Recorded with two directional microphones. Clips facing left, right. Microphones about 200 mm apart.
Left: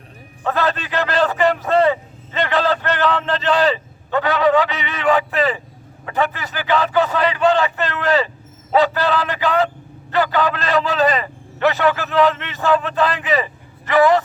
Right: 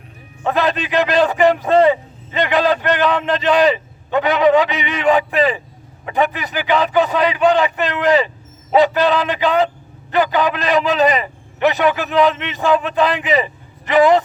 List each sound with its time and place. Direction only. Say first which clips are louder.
0.4 s a man's voice: right 2 dB; 15° right (ahead or behind)